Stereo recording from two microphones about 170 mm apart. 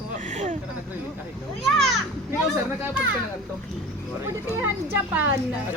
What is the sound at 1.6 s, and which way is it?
Children playing, centre (ahead or behind).